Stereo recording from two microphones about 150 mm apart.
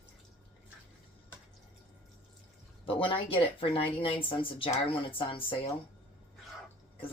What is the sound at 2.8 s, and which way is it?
Speech, 35° left (ahead or behind).